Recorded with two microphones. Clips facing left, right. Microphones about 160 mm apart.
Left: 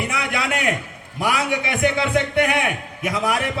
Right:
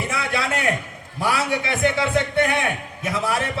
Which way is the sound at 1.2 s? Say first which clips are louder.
Left 1 dB; 15° left (ahead or behind).